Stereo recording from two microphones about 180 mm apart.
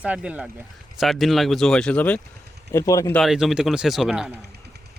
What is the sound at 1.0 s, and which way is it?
Speech, centre (ahead or behind).